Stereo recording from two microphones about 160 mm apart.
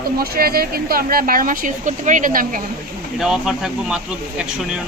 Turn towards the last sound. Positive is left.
turn(degrees=-5)  # may be behind; listen again after turning